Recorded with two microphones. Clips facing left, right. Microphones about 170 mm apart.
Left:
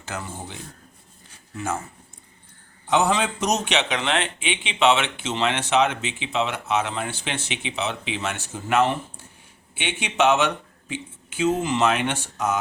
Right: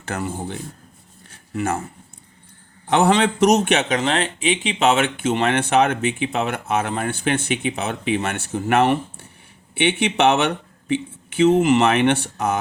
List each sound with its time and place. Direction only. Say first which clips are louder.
0.0 s speech: right 7 dB; 60° right (ahead or behind)
1.3 s a sound: right 5 dB; 65° right (ahead or behind)
2.8 s speech: right 4 dB; 60° right (ahead or behind)